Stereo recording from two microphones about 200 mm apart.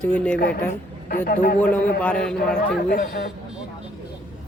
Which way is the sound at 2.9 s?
40° left (ahead or behind).